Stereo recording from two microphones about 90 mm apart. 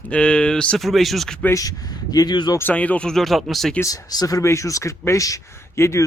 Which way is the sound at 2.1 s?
50° left (ahead or behind).